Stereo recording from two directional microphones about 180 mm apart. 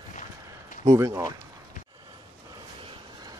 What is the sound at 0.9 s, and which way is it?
Speech, 20° right (ahead or behind).